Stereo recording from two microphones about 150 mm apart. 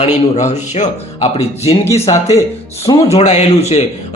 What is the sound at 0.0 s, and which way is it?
A man's voice, 50° left (ahead or behind).